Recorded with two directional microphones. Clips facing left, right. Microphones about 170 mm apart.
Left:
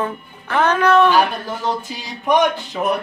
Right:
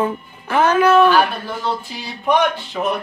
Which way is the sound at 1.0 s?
15° left (ahead or behind).